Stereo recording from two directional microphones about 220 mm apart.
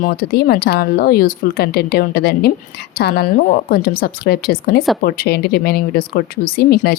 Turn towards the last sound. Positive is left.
turn(degrees=45)  # may be behind; listen again after turning